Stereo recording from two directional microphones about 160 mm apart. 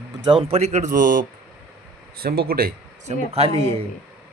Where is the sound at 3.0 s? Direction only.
40° right (ahead or behind).